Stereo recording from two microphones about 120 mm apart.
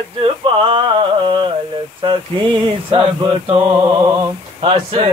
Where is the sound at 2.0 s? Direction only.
45° right (ahead or behind).